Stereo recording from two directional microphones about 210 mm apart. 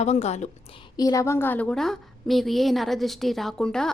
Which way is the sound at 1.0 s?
15° left (ahead or behind).